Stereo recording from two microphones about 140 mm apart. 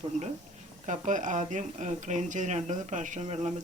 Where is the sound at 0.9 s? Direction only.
65° right (ahead or behind).